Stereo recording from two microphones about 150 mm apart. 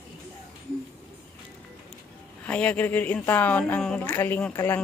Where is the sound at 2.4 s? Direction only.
10° left (ahead or behind).